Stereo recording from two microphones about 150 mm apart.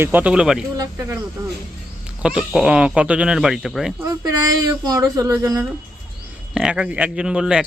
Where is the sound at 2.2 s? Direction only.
5° right (ahead or behind).